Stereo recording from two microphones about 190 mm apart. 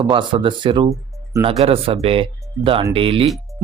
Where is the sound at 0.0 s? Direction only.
25° right (ahead or behind).